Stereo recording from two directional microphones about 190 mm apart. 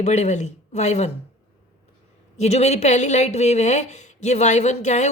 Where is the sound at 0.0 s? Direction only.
35° left (ahead or behind).